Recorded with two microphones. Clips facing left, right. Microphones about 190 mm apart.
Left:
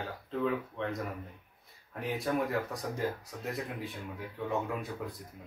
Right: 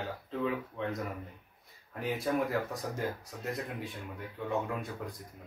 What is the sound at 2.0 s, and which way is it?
Speech, centre (ahead or behind).